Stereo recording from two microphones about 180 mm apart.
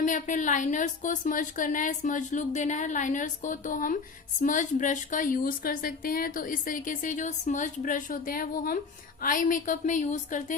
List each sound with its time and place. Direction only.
0.0 s a woman's voice: 45° left (ahead or behind)